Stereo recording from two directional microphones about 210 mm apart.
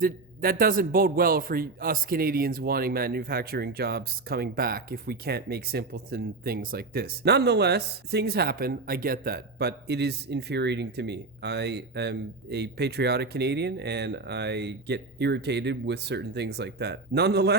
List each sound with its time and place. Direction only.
0.0 s a man's voice: 45° right (ahead or behind)